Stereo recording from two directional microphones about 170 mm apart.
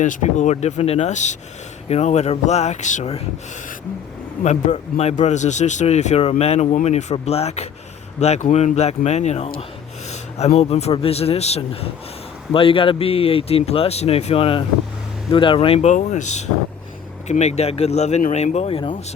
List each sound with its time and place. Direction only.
0.0 s a man's voice: 45° left (ahead or behind)
4.4 s a man's voice: 40° left (ahead or behind)